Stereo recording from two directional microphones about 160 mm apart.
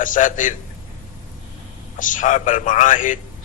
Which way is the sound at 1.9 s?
55° left (ahead or behind).